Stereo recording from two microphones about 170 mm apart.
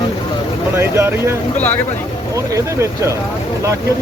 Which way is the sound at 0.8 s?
15° right (ahead or behind).